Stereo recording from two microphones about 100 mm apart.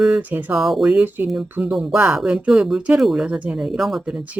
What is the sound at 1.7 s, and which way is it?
Speech, centre (ahead or behind).